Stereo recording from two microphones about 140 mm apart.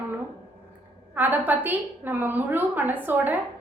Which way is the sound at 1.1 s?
15° right (ahead or behind).